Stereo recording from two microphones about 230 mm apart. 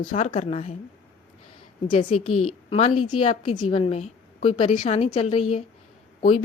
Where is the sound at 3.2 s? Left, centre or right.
Left.